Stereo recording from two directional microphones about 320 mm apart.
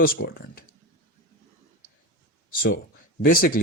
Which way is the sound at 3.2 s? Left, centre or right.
Left.